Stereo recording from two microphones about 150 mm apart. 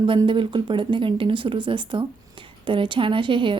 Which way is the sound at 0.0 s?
35° right (ahead or behind).